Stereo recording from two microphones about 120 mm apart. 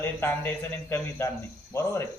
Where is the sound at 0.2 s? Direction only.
15° left (ahead or behind).